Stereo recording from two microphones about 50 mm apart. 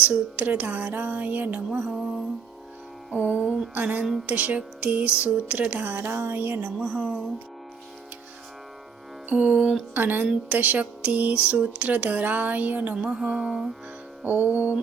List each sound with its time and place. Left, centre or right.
0.0 s speech: right
1.9 s music: centre
3.2 s speech: centre
3.8 s speech: right
5.8 s a sound: right
6.7 s a woman's voice: centre
9.3 s speech: right
9.6 s a woman's voice: centre
9.9 s speech: right
13.0 s music: centre
14.3 s speech: right